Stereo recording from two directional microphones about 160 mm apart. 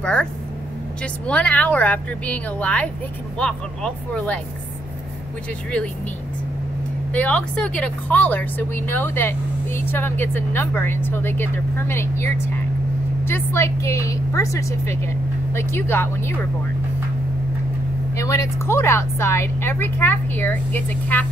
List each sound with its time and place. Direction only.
0.0 s a woman's voice: 5° left (ahead or behind)
7.1 s a woman's voice: 10° left (ahead or behind)
18.1 s a woman's voice: 20° left (ahead or behind)